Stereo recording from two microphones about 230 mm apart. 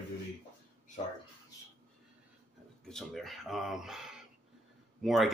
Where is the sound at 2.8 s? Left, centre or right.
Centre.